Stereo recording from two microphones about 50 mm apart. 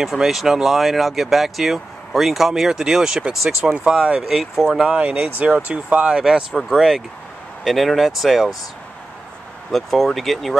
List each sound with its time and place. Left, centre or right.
0.0 s speech: centre
4.9 s speech: right
6.1 s speech: centre
9.7 s speech: centre